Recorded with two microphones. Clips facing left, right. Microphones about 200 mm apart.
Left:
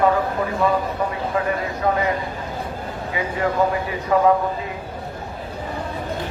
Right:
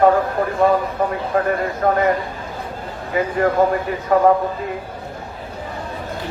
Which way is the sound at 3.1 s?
50° right (ahead or behind).